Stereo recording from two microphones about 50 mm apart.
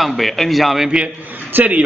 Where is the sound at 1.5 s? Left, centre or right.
Right.